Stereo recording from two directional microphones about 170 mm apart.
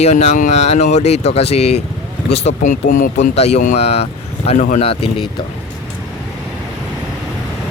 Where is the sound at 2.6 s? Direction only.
55° left (ahead or behind).